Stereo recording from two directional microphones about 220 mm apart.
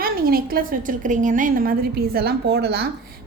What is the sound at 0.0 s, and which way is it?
A woman's voice, 40° right (ahead or behind).